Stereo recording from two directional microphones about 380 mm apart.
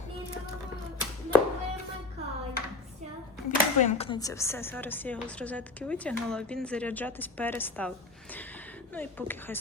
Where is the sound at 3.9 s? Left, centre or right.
Centre.